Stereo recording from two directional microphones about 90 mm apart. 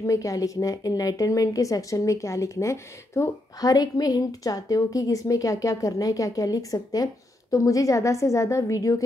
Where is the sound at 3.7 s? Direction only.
45° left (ahead or behind).